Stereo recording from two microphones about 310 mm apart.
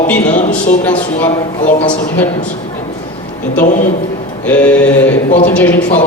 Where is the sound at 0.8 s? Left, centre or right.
Centre.